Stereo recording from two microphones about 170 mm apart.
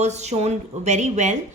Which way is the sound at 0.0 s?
40° right (ahead or behind).